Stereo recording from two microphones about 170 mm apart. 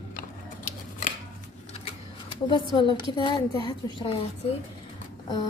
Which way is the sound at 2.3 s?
30° left (ahead or behind).